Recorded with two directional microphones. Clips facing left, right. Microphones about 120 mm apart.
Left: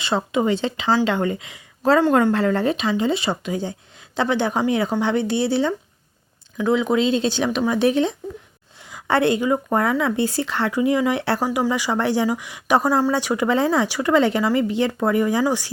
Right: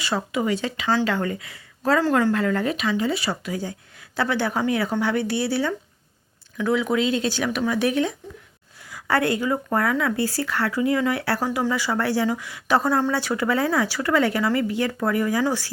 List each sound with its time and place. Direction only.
0.0 s speech: 25° left (ahead or behind)